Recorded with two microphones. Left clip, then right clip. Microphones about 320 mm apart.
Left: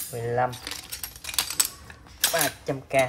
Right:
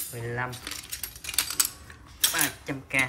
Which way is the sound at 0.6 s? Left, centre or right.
Left.